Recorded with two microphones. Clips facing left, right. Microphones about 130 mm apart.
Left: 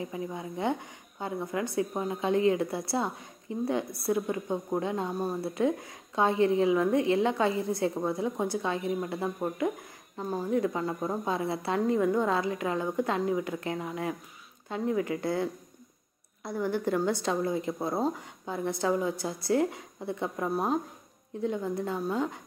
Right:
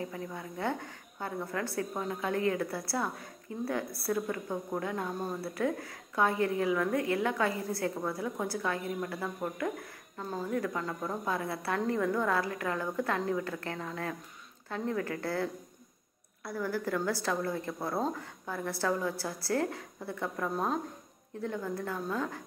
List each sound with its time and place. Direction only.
0.0 s a woman's voice: 15° left (ahead or behind)